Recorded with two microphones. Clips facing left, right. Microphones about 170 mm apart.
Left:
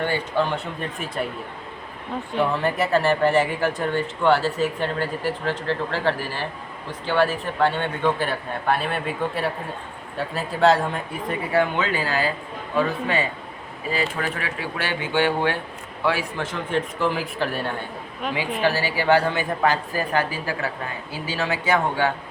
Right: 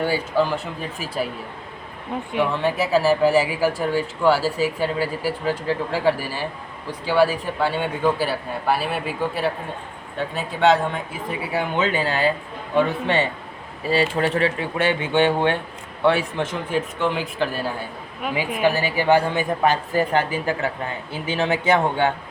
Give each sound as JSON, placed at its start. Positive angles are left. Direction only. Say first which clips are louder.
{"t": 0.0, "sound": "speech", "louder": "right 2 dB", "side_deg": -5}
{"t": 2.5, "sound": "speech", "louder": "right 2 dB", "side_deg": 0}
{"t": 11.8, "sound": "speech", "louder": "right 3 dB", "side_deg": -25}
{"t": 16.7, "sound": "speech", "louder": "even", "side_deg": 0}